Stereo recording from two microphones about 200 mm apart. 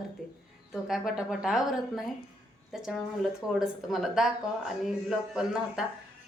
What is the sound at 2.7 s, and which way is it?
Speech, centre (ahead or behind).